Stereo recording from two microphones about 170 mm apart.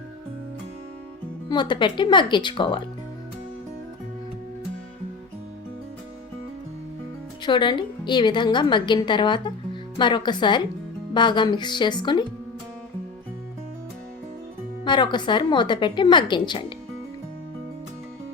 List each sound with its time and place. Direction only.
1.5 s a woman's voice: 25° left (ahead or behind)
7.4 s a woman's voice: 25° left (ahead or behind)
14.8 s a woman's voice: 25° left (ahead or behind)